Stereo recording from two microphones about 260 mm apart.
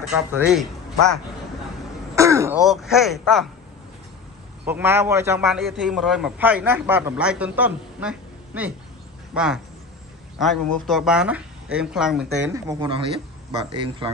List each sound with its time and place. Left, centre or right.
0.1 s a man's voice: centre
2.1 s throat clearing: centre
2.7 s a man's voice: centre
4.6 s a man's voice: centre
12.4 s speech: centre